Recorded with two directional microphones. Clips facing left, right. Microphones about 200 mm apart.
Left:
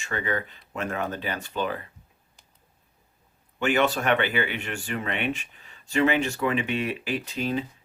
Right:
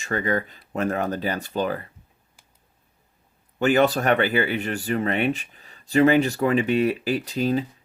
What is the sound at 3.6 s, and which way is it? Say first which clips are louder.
Speech: right 4 dB; 40° right (ahead or behind).